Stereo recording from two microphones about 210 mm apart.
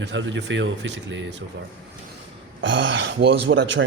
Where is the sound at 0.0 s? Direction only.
60° right (ahead or behind).